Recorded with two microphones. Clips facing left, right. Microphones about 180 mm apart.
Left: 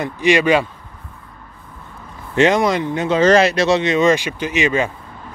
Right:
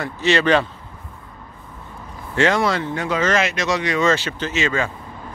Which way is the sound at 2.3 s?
20° left (ahead or behind).